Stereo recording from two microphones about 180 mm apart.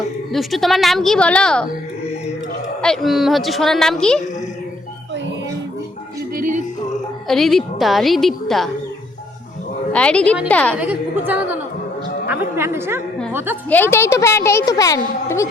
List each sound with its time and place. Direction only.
0.3 s a woman's voice: centre (ahead or behind)
2.8 s a woman's voice: centre (ahead or behind)
6.3 s music: 45° right (ahead or behind)
7.3 s a woman's voice: centre (ahead or behind)
9.9 s a woman's voice: 5° left (ahead or behind)
10.8 s a woman's voice: 10° right (ahead or behind)
13.7 s a woman's voice: 10° left (ahead or behind)